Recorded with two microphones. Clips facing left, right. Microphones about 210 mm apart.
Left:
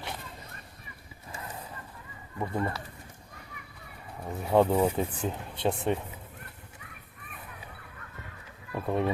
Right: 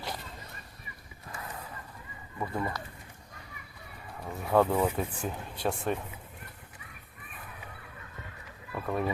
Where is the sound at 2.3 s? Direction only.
15° left (ahead or behind).